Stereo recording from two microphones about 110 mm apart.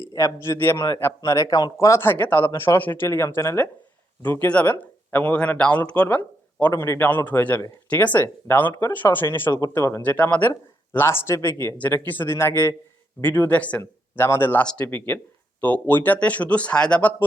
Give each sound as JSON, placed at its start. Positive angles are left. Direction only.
{"t": 0.1, "sound": "a man's voice", "side_deg": 30}
{"t": 10.0, "sound": "a man's voice", "side_deg": 15}